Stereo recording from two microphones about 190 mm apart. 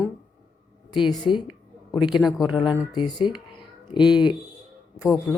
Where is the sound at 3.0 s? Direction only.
25° left (ahead or behind).